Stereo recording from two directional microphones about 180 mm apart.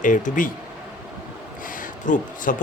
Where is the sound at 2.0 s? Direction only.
45° left (ahead or behind).